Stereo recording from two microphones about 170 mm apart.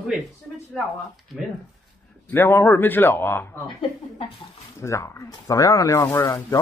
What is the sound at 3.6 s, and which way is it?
Speech, 30° left (ahead or behind).